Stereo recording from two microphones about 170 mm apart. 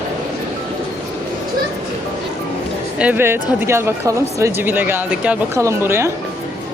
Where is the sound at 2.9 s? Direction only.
10° right (ahead or behind).